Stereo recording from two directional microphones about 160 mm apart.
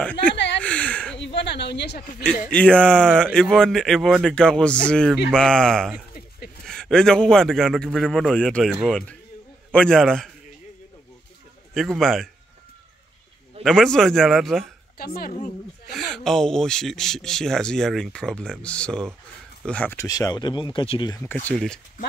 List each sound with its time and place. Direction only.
0.0 s speech: 10° left (ahead or behind)
0.6 s a sound: 10° left (ahead or behind)
1.2 s a sound: 90° left
2.5 s speech: 5° left (ahead or behind)
11.7 s speech: centre (ahead or behind)
13.7 s speech: 5° left (ahead or behind)
15.0 s a woman's voice: 70° left (ahead or behind)
15.9 s speech: centre (ahead or behind); by 21.1 s 35° left (ahead or behind)
21.1 s speech: 15° left (ahead or behind)